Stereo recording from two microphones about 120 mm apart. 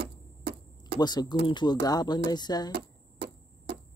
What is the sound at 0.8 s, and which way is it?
Speech, 35° left (ahead or behind).